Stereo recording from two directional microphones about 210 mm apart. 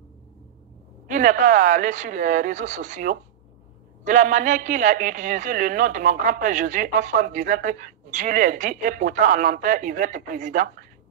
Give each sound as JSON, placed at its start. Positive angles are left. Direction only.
{"t": 1.0, "sound": "speech", "side_deg": -40}